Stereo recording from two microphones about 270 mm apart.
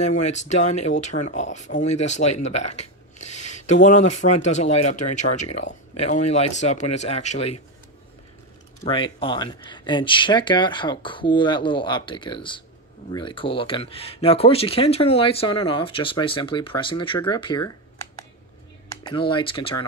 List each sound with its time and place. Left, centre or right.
0.0 s speech: left
8.8 s speech: centre
18.9 s speech: centre